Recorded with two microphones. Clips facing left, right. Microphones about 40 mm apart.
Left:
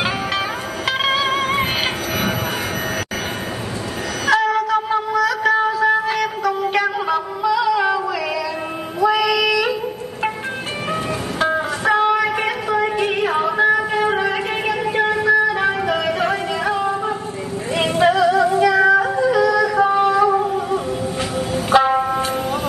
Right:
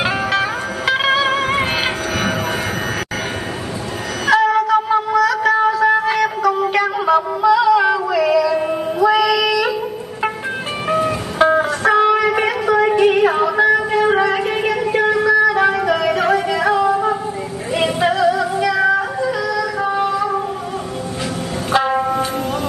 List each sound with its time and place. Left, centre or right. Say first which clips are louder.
0.0 s music: right 3 dB; centre
4.3 s a sound: right 3 dB; centre
10.9 s music: right 6 dB; centre
12.9 s a sound: right 5 dB; centre
14.3 s music: right 3 dB; centre
17.7 s female singing: left 1 dB; centre
19.1 s music: left 4 dB; centre
19.5 s yodeling: left 3 dB; centre
21.7 s music: left 1 dB; centre